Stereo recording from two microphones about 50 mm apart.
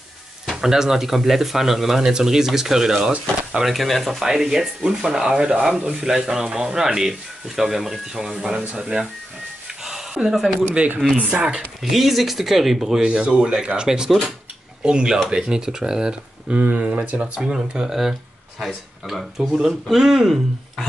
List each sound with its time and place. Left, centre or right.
0.5 s speech: centre
9.8 s a sound: centre
11.8 s speech: centre
16.5 s speech: right
17.6 s speech: centre